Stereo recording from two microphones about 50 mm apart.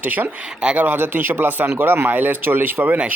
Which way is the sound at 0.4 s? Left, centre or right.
Centre.